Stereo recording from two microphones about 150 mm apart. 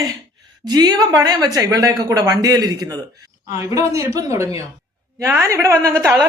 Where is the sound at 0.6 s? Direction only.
25° right (ahead or behind).